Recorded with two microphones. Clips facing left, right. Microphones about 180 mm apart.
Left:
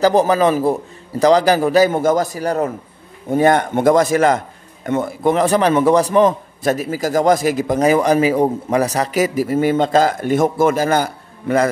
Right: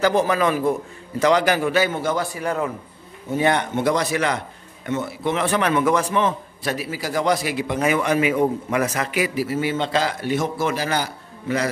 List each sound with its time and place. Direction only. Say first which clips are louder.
0.0 s a man's voice: left 5 dB; 35° left (ahead or behind)